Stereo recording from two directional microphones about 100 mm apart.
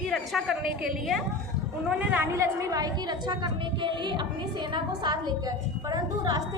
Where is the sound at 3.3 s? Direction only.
50° right (ahead or behind).